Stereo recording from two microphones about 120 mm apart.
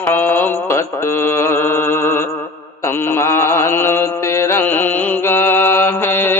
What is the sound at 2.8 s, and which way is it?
Mantra, 20° left (ahead or behind).